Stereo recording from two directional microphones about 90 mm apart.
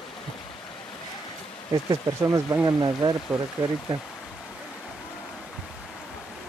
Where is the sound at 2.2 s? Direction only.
30° right (ahead or behind).